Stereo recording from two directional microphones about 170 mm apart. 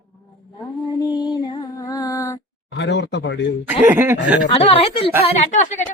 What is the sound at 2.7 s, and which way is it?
Speech, 90° left.